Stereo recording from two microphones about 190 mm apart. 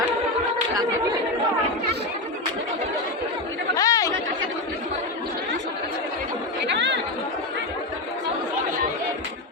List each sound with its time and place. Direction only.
3.8 s chatter: 20° left (ahead or behind)
6.7 s chatter: 70° right (ahead or behind)